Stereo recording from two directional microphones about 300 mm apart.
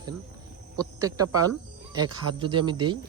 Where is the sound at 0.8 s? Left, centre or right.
Centre.